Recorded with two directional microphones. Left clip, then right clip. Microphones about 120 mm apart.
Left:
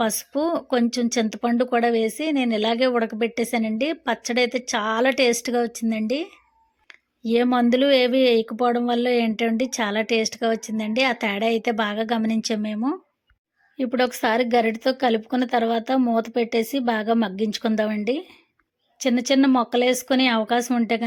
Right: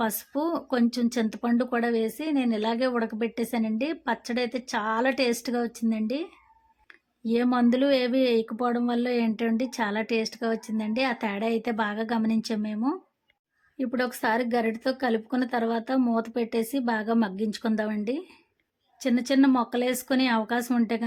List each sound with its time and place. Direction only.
0.0 s speech: 20° left (ahead or behind)
7.3 s speech: 20° left (ahead or behind)